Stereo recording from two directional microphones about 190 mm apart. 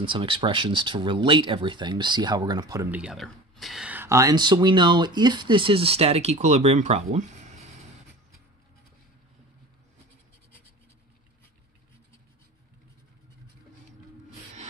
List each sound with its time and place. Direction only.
0.0 s speech: 25° right (ahead or behind)
3.0 s speech: centre (ahead or behind); by 7.5 s 35° right (ahead or behind)